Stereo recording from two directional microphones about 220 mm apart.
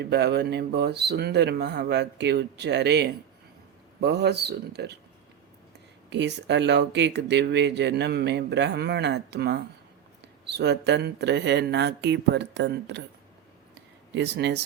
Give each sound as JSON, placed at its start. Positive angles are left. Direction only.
{"t": 0.0, "sound": "speech", "side_deg": -50}
{"t": 6.1, "sound": "speech", "side_deg": -50}
{"t": 14.1, "sound": "speech", "side_deg": -50}